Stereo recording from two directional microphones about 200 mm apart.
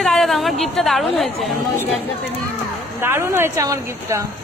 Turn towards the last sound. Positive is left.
turn(degrees=-15)  # may be behind; listen again after turning